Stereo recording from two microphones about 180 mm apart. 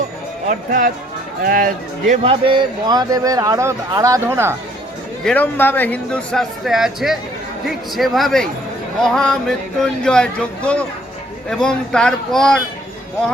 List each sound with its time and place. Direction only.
0.4 s speech: 50° right (ahead or behind)
2.2 s a man's voice: 30° right (ahead or behind); by 4.5 s 15° right (ahead or behind)
5.2 s speech: 10° left (ahead or behind)